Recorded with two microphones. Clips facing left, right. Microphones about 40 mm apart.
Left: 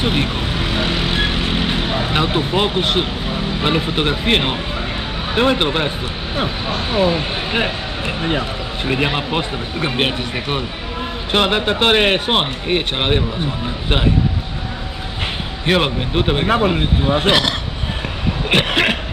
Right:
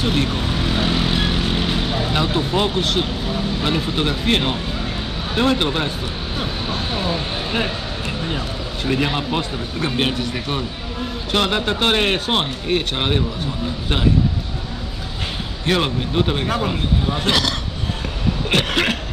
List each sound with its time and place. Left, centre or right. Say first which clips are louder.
0.0 s speech: left 1 dB; left
15.6 s speech: left 3 dB; left
18.5 s cough: left 4 dB; left